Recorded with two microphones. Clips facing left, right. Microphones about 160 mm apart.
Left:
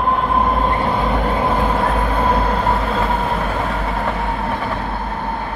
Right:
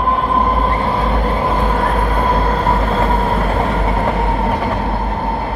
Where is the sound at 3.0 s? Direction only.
40° right (ahead or behind).